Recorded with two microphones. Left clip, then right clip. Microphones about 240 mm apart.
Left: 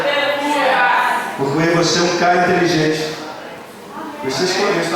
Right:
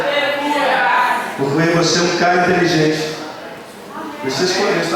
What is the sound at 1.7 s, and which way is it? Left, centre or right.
Speech, centre.